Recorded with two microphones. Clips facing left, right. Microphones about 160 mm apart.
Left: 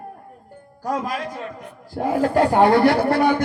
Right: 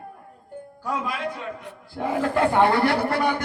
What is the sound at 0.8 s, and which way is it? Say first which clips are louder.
A man's voice: left 3 dB; 40° left (ahead or behind).